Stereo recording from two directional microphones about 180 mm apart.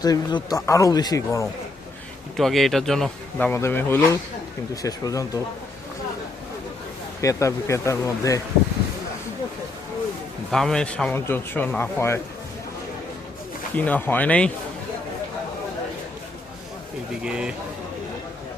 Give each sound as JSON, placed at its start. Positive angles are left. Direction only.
{"t": 0.0, "sound": "speech", "side_deg": 20}
{"t": 2.3, "sound": "a man's voice", "side_deg": 0}
{"t": 7.2, "sound": "speech", "side_deg": 15}
{"t": 10.5, "sound": "speech", "side_deg": 5}
{"t": 13.7, "sound": "speech", "side_deg": 10}
{"t": 17.2, "sound": "a man's voice", "side_deg": -5}